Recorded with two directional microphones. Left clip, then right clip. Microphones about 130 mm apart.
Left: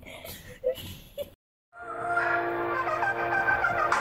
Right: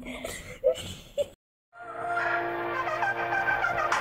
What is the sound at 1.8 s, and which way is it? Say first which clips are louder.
Music: left 2 dB; 45° right (ahead or behind).